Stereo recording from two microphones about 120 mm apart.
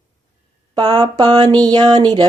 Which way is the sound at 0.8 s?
40° right (ahead or behind).